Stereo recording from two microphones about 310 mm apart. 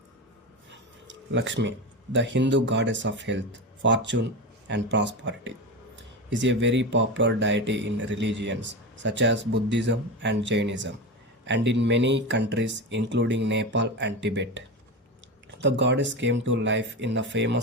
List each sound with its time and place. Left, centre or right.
1.0 s a sound: right
2.1 s speech: right
15.6 s speech: right